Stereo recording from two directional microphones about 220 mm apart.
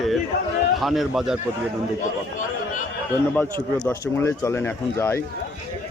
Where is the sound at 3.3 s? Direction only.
5° left (ahead or behind).